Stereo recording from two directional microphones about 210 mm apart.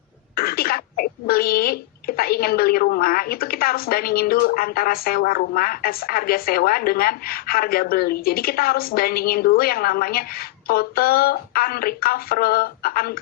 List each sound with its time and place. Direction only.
0.3 s a child's voice: 45° left (ahead or behind)